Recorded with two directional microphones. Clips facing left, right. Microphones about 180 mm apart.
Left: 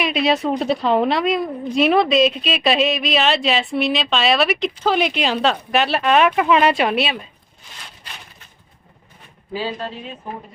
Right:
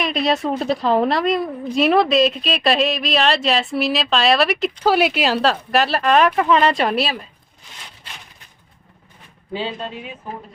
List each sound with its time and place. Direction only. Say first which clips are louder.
0.0 s a woman's voice: left 1 dB; centre (ahead or behind)
9.5 s speech: left 1 dB; 25° right (ahead or behind)